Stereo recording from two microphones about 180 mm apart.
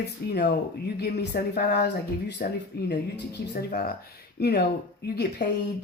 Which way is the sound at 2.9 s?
70° left (ahead or behind).